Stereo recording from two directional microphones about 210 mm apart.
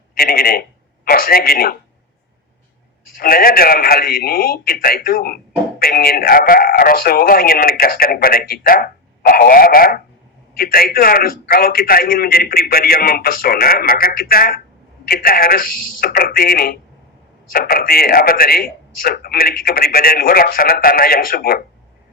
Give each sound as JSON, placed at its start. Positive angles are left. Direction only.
{"t": 0.2, "sound": "speech", "side_deg": 45}
{"t": 3.2, "sound": "speech", "side_deg": 45}